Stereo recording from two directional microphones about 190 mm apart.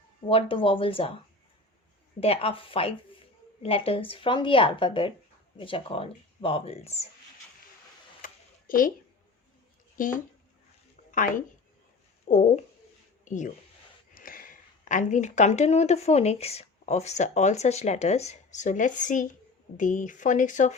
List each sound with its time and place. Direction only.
0.3 s speech: 30° left (ahead or behind)
2.2 s speech: 30° left (ahead or behind)
8.2 s a sound: 45° left (ahead or behind)
9.9 s a woman's voice: 45° left (ahead or behind)